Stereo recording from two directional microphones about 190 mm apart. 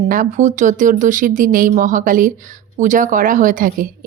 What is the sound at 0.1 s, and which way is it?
A woman's voice, 45° right (ahead or behind).